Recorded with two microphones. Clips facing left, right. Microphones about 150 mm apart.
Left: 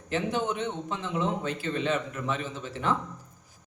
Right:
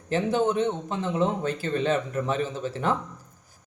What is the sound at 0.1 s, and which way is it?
A man's voice, 35° right (ahead or behind).